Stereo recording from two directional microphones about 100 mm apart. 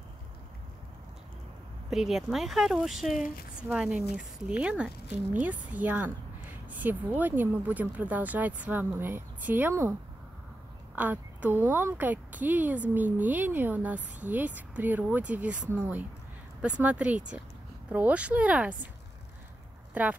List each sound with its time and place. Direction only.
1.9 s a woman's voice: 5° right (ahead or behind); by 9.9 s 20° right (ahead or behind)
11.0 s a woman's voice: 15° right (ahead or behind)
19.9 s speech: 15° right (ahead or behind)